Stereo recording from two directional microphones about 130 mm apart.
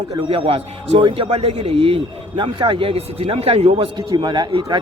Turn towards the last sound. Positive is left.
turn(degrees=-35)  # may be behind; listen again after turning